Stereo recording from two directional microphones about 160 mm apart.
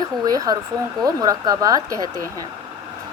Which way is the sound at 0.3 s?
25° right (ahead or behind).